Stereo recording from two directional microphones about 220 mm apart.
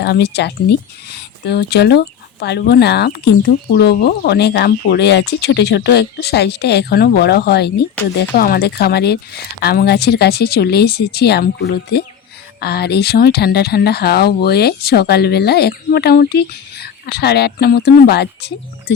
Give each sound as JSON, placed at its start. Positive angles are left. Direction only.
{"t": 0.0, "sound": "speech", "side_deg": 50}